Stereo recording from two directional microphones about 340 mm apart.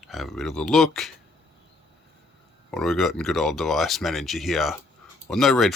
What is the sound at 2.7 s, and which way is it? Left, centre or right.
Speech, centre.